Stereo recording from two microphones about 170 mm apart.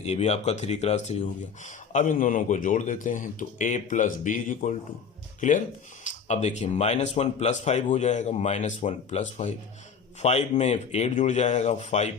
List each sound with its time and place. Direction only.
0.0 s speech: 40° left (ahead or behind)